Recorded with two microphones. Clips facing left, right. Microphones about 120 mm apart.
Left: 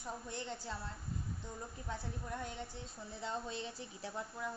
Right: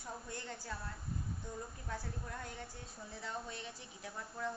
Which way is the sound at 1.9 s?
25° left (ahead or behind).